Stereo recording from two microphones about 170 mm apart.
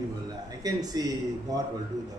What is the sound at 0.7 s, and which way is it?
Speech, 20° right (ahead or behind).